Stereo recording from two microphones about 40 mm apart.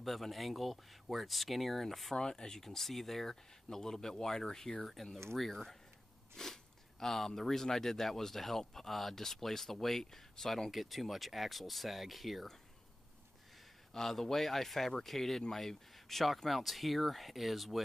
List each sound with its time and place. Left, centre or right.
0.0 s speech: centre
2.1 s speech: centre
10.7 s speech: centre
13.9 s speech: centre